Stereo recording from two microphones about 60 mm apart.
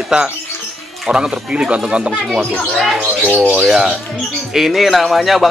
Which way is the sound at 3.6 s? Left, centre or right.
Centre.